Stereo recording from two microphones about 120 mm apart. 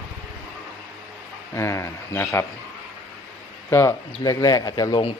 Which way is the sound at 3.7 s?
20° left (ahead or behind).